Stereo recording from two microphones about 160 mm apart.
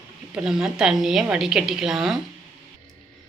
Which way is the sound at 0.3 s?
5° right (ahead or behind).